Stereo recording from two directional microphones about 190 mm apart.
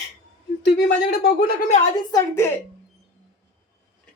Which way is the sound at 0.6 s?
65° left (ahead or behind).